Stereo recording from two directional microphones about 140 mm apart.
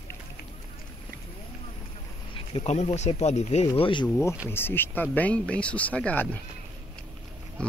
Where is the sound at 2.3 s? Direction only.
40° left (ahead or behind).